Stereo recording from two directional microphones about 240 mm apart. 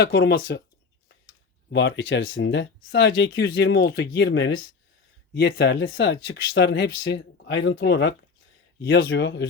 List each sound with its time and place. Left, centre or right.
0.0 s speech: left
1.7 s speech: left